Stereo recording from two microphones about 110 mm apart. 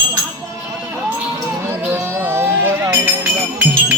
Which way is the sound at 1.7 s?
15° right (ahead or behind).